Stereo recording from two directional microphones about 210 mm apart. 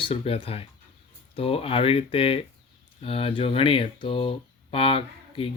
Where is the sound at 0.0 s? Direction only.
25° left (ahead or behind).